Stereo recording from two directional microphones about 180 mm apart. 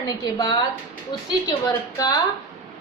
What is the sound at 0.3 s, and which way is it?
A woman's voice, 20° left (ahead or behind).